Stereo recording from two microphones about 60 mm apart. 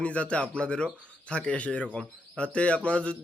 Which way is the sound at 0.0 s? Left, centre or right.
Left.